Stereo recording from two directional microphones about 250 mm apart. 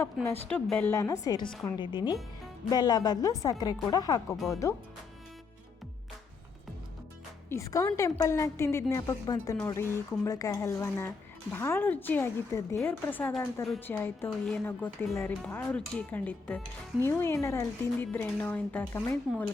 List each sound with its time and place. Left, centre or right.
0.4 s a woman's voice: centre
7.5 s a woman's voice: centre